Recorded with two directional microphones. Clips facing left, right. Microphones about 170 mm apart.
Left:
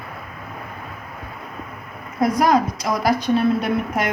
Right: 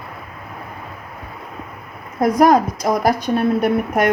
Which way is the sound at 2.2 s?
50° right (ahead or behind).